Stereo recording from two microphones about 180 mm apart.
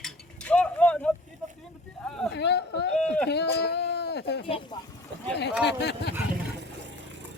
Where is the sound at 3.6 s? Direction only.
65° left (ahead or behind).